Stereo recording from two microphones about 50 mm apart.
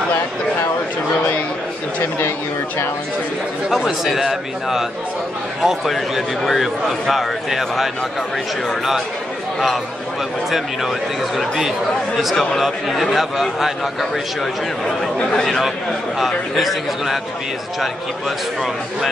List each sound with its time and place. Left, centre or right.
3.7 s a man's voice: centre
10.5 s speech: centre
12.4 s a man's voice: centre